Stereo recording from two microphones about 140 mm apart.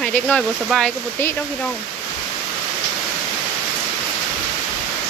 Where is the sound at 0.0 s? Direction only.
10° left (ahead or behind).